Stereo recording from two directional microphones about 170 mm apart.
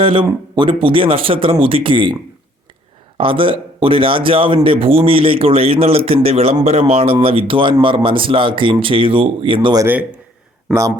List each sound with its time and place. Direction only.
0.0 s speech: 30° right (ahead or behind)
3.2 s speech: 30° right (ahead or behind)
9.6 s a man's voice: 20° right (ahead or behind)